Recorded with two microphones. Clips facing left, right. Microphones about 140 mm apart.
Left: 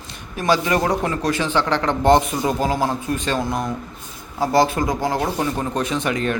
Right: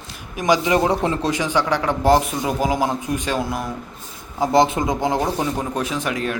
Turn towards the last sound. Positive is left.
turn(degrees=-5)  # may be behind; listen again after turning